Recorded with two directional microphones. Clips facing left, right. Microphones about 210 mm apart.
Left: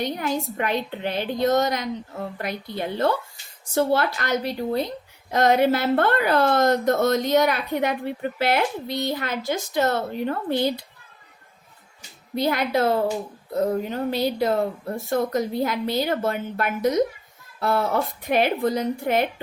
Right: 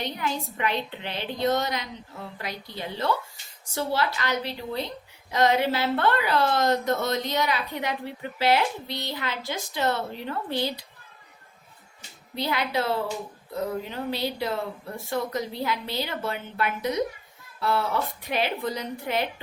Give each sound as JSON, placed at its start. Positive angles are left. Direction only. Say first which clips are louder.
{"t": 0.0, "sound": "a woman's voice", "louder": "left 5 dB", "side_deg": 45}
{"t": 12.3, "sound": "a woman's voice", "louder": "left 5 dB", "side_deg": 45}